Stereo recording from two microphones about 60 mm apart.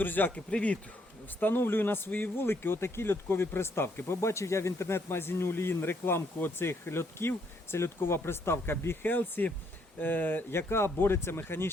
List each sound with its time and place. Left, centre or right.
0.0 s speech: left
0.3 s speech: left
1.4 s speech: left
10.5 s speech: left